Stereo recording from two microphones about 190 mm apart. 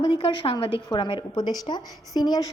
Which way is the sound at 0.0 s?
25° left (ahead or behind).